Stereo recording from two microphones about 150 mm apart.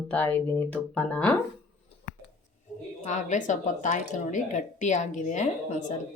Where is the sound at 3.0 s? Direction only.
55° left (ahead or behind).